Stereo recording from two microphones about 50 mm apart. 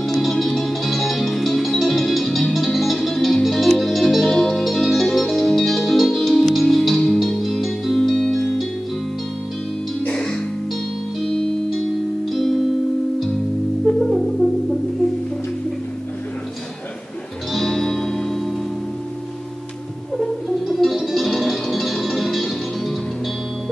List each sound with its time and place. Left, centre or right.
0.2 s music: centre
10.0 s music: centre
13.9 s music: centre
17.5 s music: centre
20.6 s music: centre